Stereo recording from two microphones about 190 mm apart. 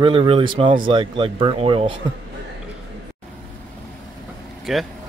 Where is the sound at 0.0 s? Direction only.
30° right (ahead or behind).